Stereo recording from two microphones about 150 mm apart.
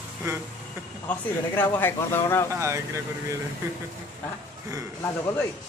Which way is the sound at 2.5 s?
20° right (ahead or behind).